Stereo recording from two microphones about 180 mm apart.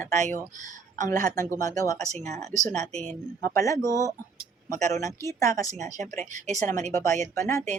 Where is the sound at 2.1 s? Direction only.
40° right (ahead or behind).